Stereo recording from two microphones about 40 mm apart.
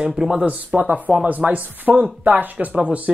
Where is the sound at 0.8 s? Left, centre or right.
Right.